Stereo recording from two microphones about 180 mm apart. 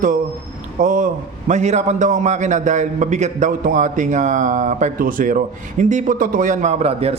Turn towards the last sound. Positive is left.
turn(degrees=-35)  # may be behind; listen again after turning